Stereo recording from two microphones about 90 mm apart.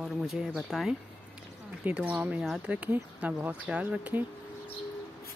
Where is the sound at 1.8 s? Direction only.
15° right (ahead or behind).